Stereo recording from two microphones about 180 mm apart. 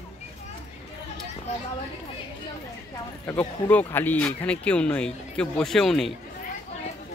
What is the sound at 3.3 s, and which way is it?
Speech, 10° left (ahead or behind).